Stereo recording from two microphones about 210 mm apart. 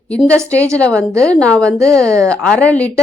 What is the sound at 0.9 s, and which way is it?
A woman's voice, 15° right (ahead or behind).